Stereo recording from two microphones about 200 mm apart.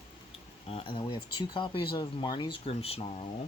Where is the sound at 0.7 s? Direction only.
30° left (ahead or behind).